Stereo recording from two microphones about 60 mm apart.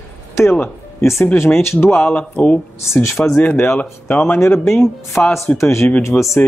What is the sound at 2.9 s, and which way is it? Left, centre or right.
Speech, left.